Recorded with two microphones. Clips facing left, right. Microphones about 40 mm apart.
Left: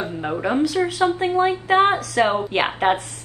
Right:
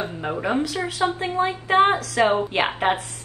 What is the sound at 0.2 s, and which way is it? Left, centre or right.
A woman's voice, centre.